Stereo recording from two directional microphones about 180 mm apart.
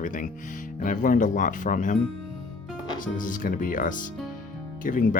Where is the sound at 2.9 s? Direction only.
50° left (ahead or behind).